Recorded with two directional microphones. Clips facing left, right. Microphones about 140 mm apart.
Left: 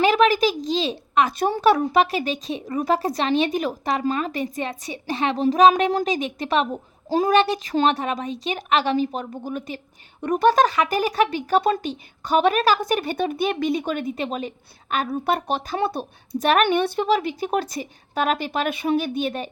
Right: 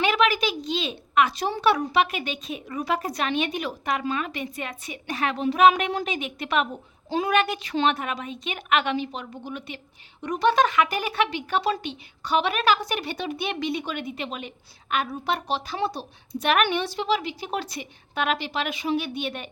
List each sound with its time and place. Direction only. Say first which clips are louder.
0.0 s a woman's voice: left 5 dB; 40° left (ahead or behind)
1.3 s a woman's voice: left 4 dB; 50° left (ahead or behind)
16.6 s a woman's voice: left 5 dB; 55° left (ahead or behind)